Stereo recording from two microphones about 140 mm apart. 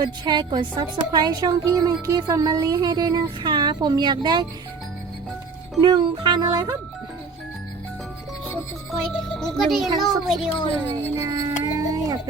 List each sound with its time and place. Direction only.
0.0 s a woman's voice: 30° right (ahead or behind)
5.8 s a woman's voice: 30° right (ahead or behind)
8.9 s a child's voice: 5° left (ahead or behind)
11.2 s a sound: 25° right (ahead or behind)